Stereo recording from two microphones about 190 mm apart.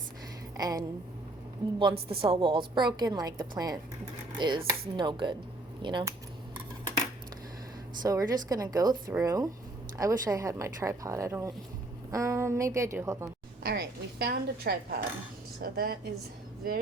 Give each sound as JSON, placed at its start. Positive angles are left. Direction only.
{"t": 0.5, "sound": "a sound", "side_deg": -20}
{"t": 1.8, "sound": "a woman's voice", "side_deg": -25}
{"t": 8.0, "sound": "a woman's voice", "side_deg": -20}
{"t": 13.6, "sound": "a woman's voice", "side_deg": -55}